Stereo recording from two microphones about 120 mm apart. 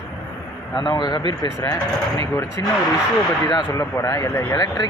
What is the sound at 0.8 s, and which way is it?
Speech, 35° left (ahead or behind).